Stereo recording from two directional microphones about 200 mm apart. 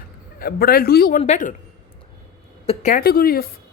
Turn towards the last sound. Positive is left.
turn(degrees=50)  # may be behind; listen again after turning